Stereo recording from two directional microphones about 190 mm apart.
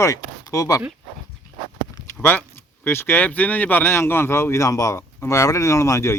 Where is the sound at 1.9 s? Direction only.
15° left (ahead or behind).